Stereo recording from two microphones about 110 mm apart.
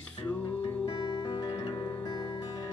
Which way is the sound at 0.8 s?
40° left (ahead or behind).